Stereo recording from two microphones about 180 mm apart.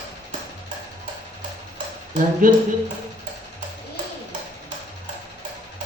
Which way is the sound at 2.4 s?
50° right (ahead or behind).